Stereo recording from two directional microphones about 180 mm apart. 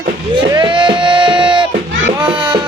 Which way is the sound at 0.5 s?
25° right (ahead or behind).